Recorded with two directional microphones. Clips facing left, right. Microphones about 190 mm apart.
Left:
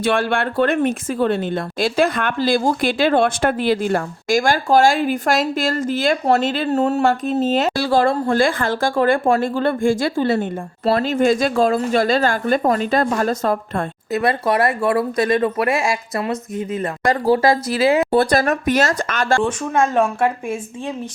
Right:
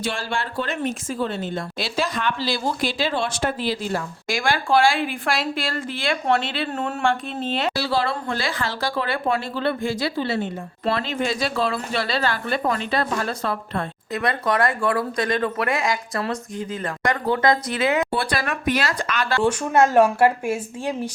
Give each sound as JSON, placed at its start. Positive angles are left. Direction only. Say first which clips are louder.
{"t": 0.0, "sound": "speech", "louder": "left 8 dB", "side_deg": 60}
{"t": 14.1, "sound": "speech", "louder": "left 5 dB", "side_deg": 25}
{"t": 18.1, "sound": "speech", "louder": "left 9 dB", "side_deg": 45}
{"t": 19.4, "sound": "speech", "louder": "even", "side_deg": -5}